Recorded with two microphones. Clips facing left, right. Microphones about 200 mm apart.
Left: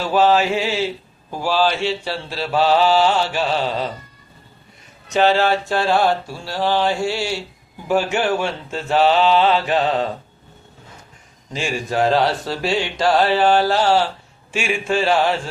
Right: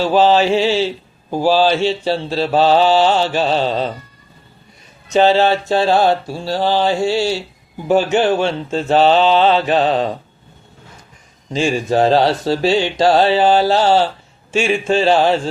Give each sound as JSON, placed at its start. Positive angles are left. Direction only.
{"t": 0.0, "sound": "speech", "side_deg": -25}
{"t": 1.3, "sound": "mantra", "side_deg": -30}
{"t": 5.1, "sound": "speech", "side_deg": -25}
{"t": 11.5, "sound": "speech", "side_deg": -25}